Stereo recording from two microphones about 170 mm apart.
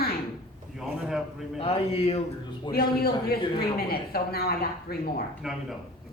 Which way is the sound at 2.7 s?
65° left (ahead or behind).